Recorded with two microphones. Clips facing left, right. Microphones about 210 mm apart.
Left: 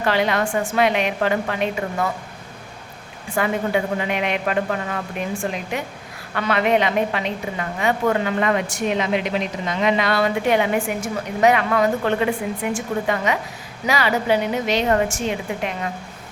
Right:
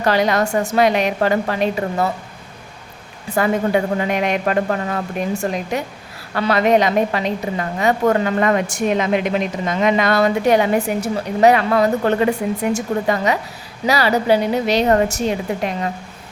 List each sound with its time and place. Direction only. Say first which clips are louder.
0.0 s a woman's voice: right 3 dB; 40° right (ahead or behind)
3.2 s a woman's voice: right 4 dB; 40° right (ahead or behind)